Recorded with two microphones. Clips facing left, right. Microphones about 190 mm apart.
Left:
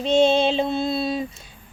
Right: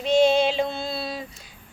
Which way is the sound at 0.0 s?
25° left (ahead or behind).